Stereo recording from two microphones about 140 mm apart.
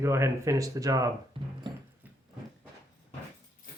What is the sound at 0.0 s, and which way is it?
Speech, 20° right (ahead or behind).